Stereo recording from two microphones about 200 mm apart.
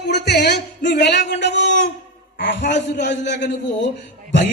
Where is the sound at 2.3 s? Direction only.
60° left (ahead or behind).